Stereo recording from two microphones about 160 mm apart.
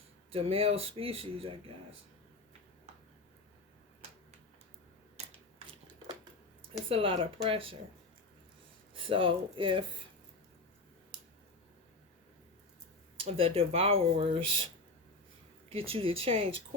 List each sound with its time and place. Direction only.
0.3 s speech: 35° right (ahead or behind)
6.8 s speech: 35° right (ahead or behind)
9.0 s speech: 35° right (ahead or behind)
13.2 s speech: 35° right (ahead or behind)
15.7 s speech: 35° right (ahead or behind)